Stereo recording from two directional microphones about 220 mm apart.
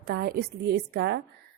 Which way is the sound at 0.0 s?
45° right (ahead or behind).